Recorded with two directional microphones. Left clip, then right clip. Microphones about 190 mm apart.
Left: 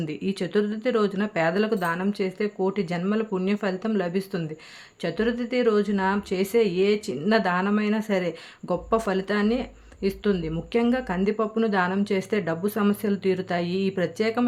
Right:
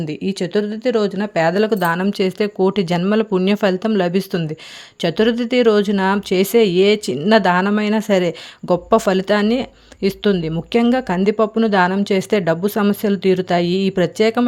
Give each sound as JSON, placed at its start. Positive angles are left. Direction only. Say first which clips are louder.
{"t": 0.0, "sound": "speech", "louder": "right 6 dB", "side_deg": -30}